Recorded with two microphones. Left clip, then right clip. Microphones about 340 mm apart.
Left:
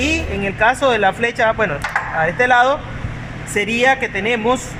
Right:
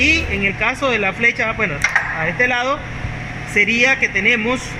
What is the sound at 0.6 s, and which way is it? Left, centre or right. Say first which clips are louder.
Speech: left 7 dB; left.